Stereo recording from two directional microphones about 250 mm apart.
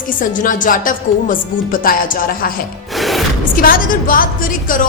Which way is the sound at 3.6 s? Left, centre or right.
Left.